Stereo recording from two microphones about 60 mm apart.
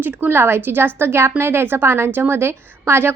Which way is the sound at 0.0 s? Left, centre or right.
Right.